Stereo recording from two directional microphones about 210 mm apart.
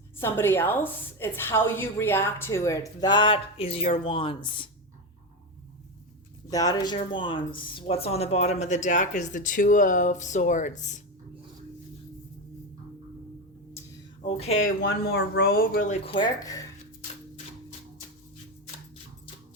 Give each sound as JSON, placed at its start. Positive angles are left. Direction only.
{"t": 0.2, "sound": "a woman's voice", "side_deg": 10}
{"t": 6.5, "sound": "speech", "side_deg": 15}
{"t": 14.2, "sound": "speech", "side_deg": 30}
{"t": 14.8, "sound": "speech", "side_deg": 50}
{"t": 15.9, "sound": "speech", "side_deg": 25}